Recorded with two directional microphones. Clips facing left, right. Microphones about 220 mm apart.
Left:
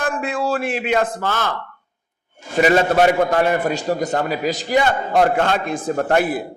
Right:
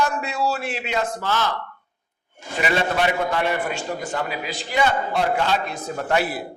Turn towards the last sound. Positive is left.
turn(degrees=50)  # may be behind; listen again after turning